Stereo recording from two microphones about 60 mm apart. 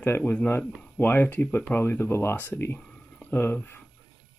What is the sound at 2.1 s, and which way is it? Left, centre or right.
Speech, left.